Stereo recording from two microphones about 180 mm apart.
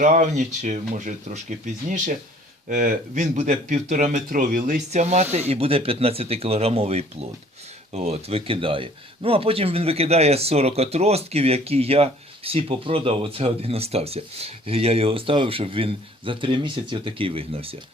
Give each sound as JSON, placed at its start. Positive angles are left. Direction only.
{"t": 0.0, "sound": "speech", "side_deg": -45}